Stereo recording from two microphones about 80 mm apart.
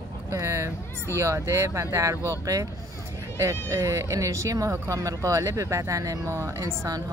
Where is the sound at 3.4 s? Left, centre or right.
Right.